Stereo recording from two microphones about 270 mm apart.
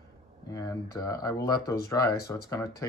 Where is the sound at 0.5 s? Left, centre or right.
Centre.